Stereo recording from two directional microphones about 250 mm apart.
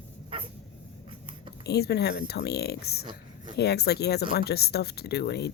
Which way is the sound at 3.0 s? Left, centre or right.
Centre.